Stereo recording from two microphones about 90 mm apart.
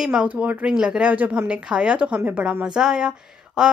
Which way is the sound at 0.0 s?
10° right (ahead or behind).